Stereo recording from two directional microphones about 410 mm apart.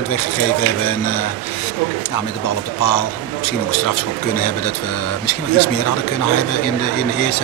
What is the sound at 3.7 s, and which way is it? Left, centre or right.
A man's voice, left.